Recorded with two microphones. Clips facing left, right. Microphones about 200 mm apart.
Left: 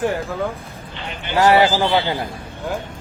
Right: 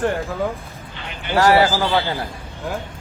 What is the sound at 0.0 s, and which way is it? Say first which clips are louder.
Speech: even; 5° left (ahead or behind).